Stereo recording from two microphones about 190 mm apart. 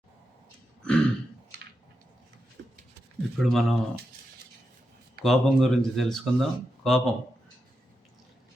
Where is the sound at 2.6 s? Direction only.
80° right.